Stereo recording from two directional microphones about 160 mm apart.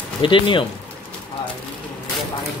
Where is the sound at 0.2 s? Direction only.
30° left (ahead or behind).